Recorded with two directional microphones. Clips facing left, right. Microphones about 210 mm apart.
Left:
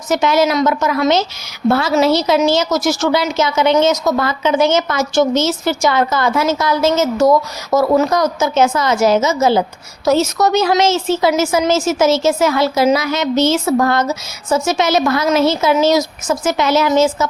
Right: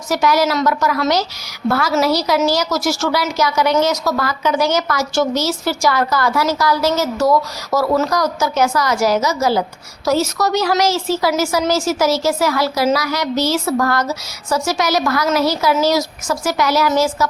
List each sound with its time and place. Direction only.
0.1 s a woman's voice: 25° left (ahead or behind)